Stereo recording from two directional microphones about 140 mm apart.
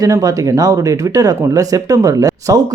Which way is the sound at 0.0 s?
25° right (ahead or behind).